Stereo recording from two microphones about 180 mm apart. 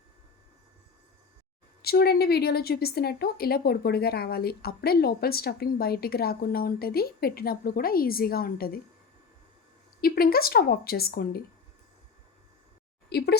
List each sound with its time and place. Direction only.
1.8 s a woman's voice: 60° left (ahead or behind)
10.0 s a woman's voice: 55° left (ahead or behind)
13.1 s speech: 65° left (ahead or behind)